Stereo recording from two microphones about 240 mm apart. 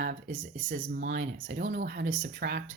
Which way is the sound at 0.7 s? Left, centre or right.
Right.